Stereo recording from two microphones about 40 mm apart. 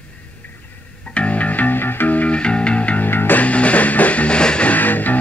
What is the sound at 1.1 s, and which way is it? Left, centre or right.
Music, left.